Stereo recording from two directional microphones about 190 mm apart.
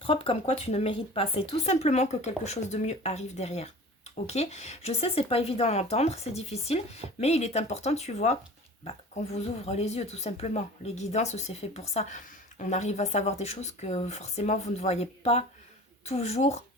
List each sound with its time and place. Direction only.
0.0 s speech: 30° left (ahead or behind)